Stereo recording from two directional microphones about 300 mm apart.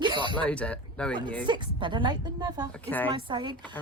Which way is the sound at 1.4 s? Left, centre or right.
Centre.